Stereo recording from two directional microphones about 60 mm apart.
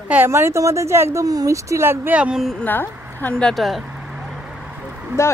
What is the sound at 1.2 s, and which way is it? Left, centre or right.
Speech, right.